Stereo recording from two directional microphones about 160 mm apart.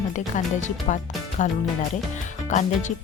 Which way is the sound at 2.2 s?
50° left (ahead or behind).